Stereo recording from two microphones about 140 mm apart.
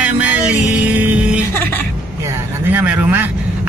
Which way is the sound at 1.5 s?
15° left (ahead or behind).